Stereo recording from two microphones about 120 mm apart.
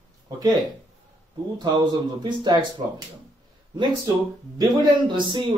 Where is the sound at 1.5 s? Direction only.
40° right (ahead or behind).